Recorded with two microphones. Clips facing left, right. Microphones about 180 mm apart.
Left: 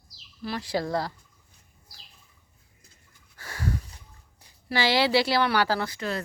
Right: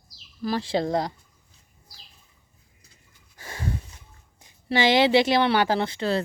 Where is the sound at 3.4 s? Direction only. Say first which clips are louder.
Even; 20° right (ahead or behind).